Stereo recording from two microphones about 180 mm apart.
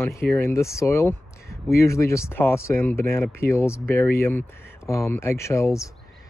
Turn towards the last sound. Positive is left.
turn(degrees=15)  # may be behind; listen again after turning